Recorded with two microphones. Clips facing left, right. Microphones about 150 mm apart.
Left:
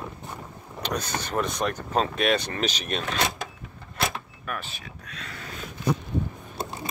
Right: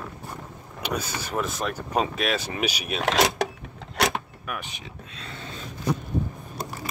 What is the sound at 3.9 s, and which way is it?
Vehicle, 75° right (ahead or behind).